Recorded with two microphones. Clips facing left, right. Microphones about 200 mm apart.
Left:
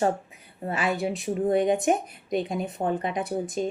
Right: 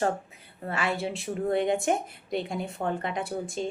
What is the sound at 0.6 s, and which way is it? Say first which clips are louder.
A woman's voice: left 3 dB; 20° left (ahead or behind).